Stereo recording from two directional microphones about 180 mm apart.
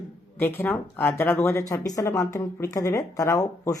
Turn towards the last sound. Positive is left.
turn(degrees=20)  # may be behind; listen again after turning